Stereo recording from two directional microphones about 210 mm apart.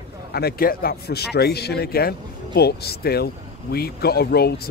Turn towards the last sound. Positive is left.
turn(degrees=50)  # may be behind; listen again after turning